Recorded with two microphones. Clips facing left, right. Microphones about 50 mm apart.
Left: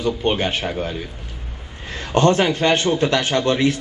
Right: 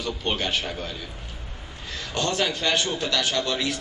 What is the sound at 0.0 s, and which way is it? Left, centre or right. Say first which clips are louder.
A man's voice: left 7 dB; left.